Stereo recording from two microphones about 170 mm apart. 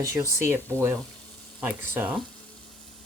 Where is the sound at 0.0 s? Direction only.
15° right (ahead or behind).